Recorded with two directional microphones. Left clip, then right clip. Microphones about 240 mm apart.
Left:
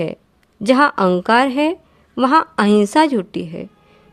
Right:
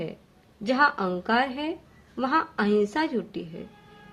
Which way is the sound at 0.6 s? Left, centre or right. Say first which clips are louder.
Left 9 dB; left.